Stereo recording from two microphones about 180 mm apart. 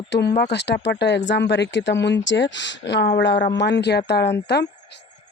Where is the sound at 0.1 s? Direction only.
75° left (ahead or behind).